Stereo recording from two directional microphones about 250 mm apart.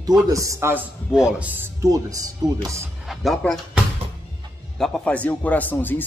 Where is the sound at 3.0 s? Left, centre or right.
Centre.